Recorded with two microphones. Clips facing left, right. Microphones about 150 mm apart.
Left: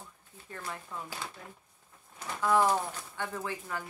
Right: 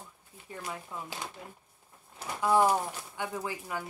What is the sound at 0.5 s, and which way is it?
Speech, 15° right (ahead or behind).